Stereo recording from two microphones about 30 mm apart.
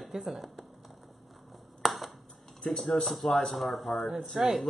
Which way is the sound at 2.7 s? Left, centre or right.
Centre.